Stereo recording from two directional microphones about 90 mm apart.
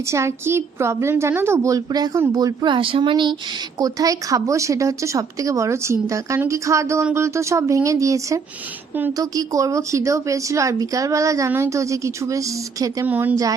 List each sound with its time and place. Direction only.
0.0 s a woman's voice: 30° right (ahead or behind)
1.7 s speech: 50° right (ahead or behind)
2.7 s speech: 70° right (ahead or behind)
3.8 s a woman's voice: 45° right (ahead or behind)
13.1 s a woman's voice: 20° right (ahead or behind)